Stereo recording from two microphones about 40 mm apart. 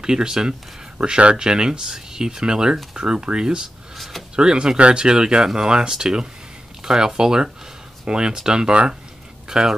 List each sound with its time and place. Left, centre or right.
0.0 s speech: centre
0.9 s speech: right